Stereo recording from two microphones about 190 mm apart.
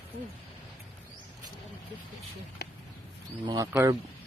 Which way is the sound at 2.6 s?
60° left (ahead or behind).